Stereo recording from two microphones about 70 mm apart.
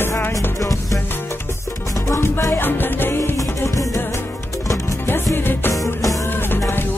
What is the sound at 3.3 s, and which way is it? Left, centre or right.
Music, left.